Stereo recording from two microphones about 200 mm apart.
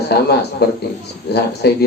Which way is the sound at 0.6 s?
55° left (ahead or behind).